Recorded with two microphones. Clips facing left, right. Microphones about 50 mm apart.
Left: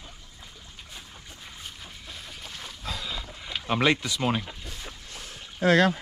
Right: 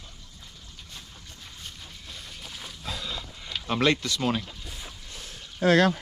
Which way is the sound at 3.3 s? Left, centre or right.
Centre.